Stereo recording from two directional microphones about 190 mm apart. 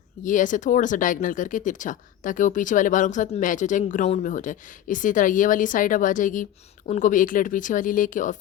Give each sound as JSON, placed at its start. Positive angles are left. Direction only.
{"t": 0.2, "sound": "speech", "side_deg": 45}